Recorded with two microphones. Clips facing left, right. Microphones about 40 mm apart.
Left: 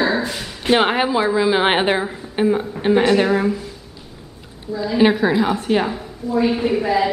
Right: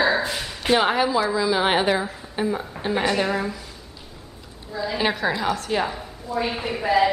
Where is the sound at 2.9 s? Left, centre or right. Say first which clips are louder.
Left 6 dB; centre.